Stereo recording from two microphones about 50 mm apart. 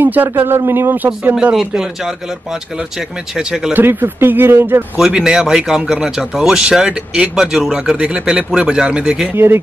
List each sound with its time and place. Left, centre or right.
0.0 s a man's voice: right
0.4 s speech: right
3.3 s speech: centre
3.7 s speech: right
4.9 s speech: centre
9.3 s speech: right